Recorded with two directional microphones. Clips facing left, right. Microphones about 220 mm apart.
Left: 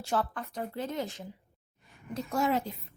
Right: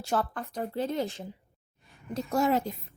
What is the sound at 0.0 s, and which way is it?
A woman's voice, 40° right (ahead or behind).